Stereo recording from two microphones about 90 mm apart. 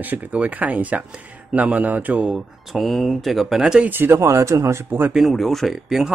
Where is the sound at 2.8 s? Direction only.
Centre (ahead or behind).